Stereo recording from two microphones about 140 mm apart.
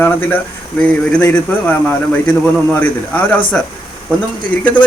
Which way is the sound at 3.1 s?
10° left (ahead or behind).